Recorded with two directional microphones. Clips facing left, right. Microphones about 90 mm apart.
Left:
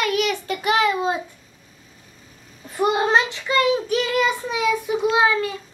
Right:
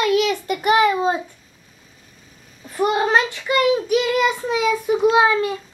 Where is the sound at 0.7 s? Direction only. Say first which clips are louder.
Right 3 dB; 10° right (ahead or behind).